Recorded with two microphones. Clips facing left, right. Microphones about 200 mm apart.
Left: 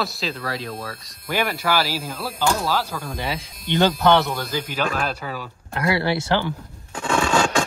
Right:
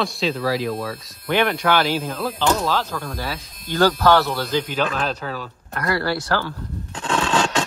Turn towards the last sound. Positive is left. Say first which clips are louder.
# left 1 dB
turn(degrees=10)  # may be behind; listen again after turning